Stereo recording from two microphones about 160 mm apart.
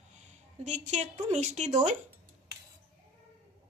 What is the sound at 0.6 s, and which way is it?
A woman's voice, 50° right (ahead or behind).